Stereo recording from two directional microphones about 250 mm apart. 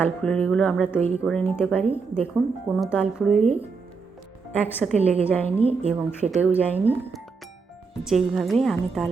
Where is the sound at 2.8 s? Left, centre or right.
Centre.